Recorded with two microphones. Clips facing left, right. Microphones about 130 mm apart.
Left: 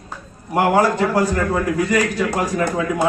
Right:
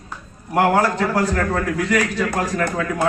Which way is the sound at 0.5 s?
10° left (ahead or behind).